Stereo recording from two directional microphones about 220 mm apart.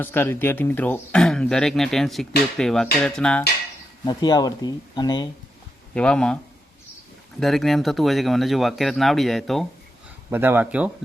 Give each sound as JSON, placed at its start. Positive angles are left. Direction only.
{"t": 0.0, "sound": "speech", "side_deg": 10}
{"t": 4.0, "sound": "speech", "side_deg": 20}
{"t": 5.9, "sound": "speech", "side_deg": 5}